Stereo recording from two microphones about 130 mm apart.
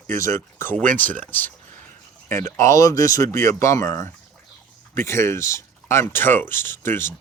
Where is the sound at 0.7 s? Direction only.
10° left (ahead or behind).